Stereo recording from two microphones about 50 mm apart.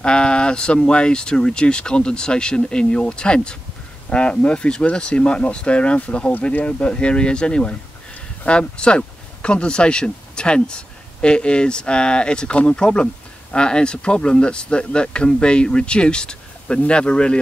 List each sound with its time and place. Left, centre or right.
0.0 s speech: left